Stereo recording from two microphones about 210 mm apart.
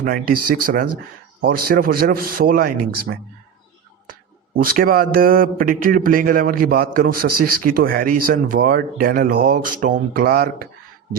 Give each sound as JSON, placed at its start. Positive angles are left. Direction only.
{"t": 0.0, "sound": "a man's voice", "side_deg": -45}
{"t": 4.5, "sound": "a man's voice", "side_deg": -45}